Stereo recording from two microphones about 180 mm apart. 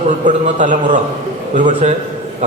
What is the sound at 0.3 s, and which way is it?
A man's voice, 45° right (ahead or behind).